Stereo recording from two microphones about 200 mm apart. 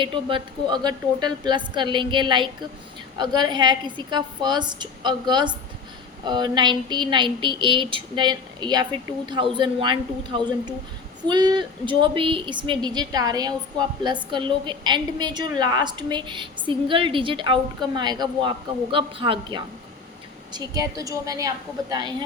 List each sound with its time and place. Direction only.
0.0 s a woman's voice: 25° right (ahead or behind)